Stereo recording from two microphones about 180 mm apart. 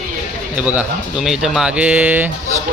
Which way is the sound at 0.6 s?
5° right (ahead or behind).